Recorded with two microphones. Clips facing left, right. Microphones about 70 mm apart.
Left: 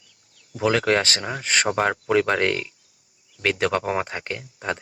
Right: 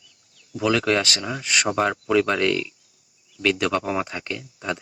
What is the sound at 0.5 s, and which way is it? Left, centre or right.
Speech, left.